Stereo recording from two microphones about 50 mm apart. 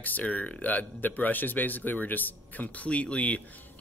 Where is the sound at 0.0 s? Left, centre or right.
Left.